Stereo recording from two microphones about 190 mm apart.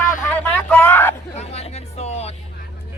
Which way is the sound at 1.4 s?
35° left (ahead or behind).